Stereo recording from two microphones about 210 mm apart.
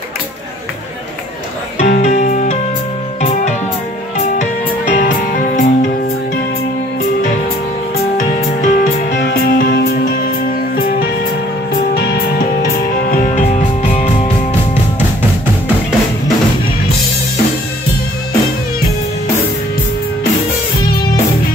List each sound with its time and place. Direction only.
1.8 s music: 35° left (ahead or behind)
4.9 s music: 40° left (ahead or behind)
8.2 s music: 40° left (ahead or behind)
11.9 s music: 50° left (ahead or behind)
13.1 s music: 40° left (ahead or behind)